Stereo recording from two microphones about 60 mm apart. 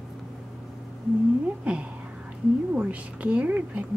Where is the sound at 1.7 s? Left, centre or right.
Right.